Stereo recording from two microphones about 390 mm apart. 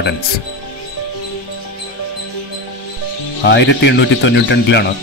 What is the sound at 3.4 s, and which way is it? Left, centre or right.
Speech, left.